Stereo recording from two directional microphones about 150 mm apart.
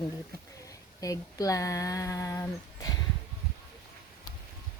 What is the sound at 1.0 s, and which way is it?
Speech, 25° left (ahead or behind).